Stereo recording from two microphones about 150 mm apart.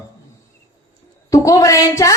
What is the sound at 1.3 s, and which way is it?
Speech, 20° left (ahead or behind).